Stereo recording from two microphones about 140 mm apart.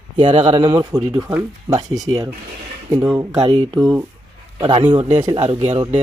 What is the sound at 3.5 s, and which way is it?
Speech, 40° right (ahead or behind).